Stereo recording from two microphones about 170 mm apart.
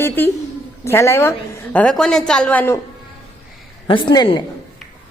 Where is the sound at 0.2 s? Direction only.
10° left (ahead or behind).